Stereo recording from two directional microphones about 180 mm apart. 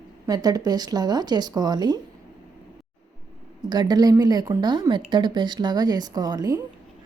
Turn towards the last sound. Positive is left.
turn(degrees=-20)  # may be behind; listen again after turning